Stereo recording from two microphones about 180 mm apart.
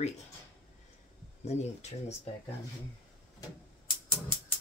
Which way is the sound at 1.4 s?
40° left (ahead or behind).